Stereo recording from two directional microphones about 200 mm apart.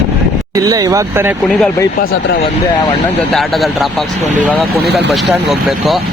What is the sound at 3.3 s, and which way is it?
Speech, centre (ahead or behind).